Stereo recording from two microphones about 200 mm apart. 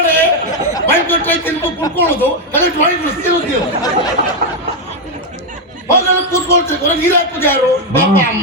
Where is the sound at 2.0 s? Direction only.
10° left (ahead or behind).